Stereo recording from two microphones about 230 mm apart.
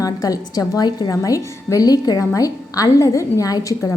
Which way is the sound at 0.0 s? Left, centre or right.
Centre.